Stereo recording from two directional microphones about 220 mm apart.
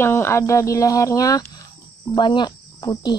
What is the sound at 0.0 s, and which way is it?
Speech, 10° left (ahead or behind).